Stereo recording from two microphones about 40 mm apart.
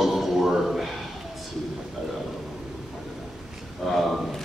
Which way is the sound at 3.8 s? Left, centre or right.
Centre.